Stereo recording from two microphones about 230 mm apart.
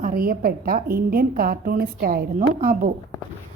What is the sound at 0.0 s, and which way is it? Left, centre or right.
A woman's voice, right.